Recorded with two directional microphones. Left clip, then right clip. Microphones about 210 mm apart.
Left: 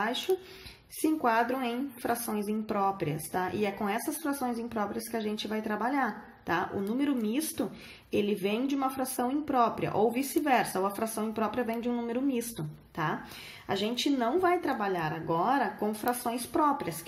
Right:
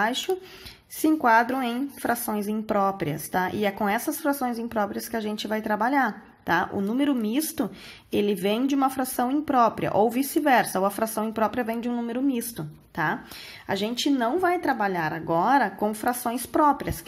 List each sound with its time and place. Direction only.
1.0 s speech: 40° right (ahead or behind)